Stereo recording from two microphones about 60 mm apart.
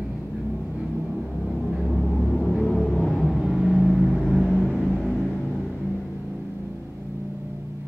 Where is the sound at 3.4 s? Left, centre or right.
Centre.